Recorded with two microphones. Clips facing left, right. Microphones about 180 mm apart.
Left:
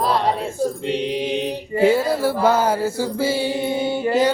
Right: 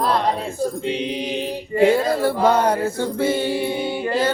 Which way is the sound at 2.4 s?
5° left (ahead or behind).